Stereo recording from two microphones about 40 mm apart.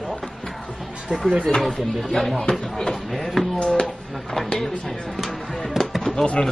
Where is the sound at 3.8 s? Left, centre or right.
Centre.